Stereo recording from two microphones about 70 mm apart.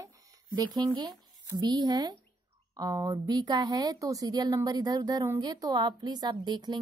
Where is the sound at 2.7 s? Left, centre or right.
Right.